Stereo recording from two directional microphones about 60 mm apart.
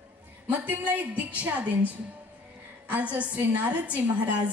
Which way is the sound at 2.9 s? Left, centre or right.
Right.